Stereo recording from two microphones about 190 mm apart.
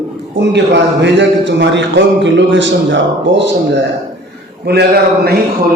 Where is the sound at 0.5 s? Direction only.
65° right (ahead or behind).